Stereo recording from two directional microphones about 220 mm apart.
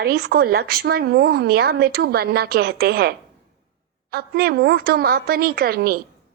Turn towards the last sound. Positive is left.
turn(degrees=-45)  # may be behind; listen again after turning